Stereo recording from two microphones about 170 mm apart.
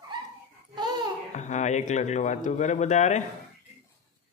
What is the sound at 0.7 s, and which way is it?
Babbling, 25° right (ahead or behind).